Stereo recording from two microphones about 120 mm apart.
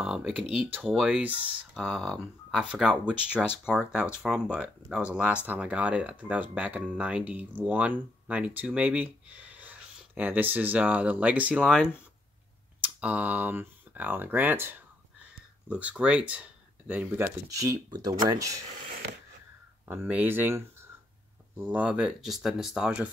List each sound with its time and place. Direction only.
0.0 s speech: 5° right (ahead or behind)
1.8 s speech: 5° left (ahead or behind)
3.1 s speech: 15° left (ahead or behind)
3.7 s speech: 5° right (ahead or behind)
12.8 s speech: 15° right (ahead or behind)
17.5 s speech: 30° right (ahead or behind)
19.9 s speech: 15° right (ahead or behind)